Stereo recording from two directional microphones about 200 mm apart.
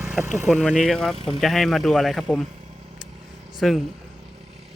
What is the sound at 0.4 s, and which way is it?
Speech, 5° left (ahead or behind).